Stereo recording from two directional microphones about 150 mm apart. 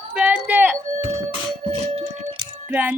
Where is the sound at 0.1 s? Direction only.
10° right (ahead or behind).